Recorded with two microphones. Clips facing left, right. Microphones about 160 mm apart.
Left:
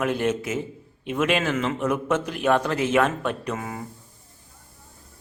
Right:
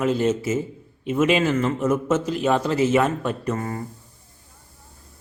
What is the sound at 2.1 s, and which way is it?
Speech, 60° left (ahead or behind).